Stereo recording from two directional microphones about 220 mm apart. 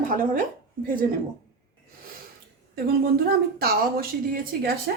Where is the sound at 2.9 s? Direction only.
45° right (ahead or behind).